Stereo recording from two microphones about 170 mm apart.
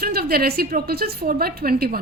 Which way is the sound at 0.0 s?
65° right (ahead or behind).